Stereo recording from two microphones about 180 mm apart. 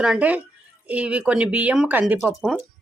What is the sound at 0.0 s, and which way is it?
Speech, 5° right (ahead or behind).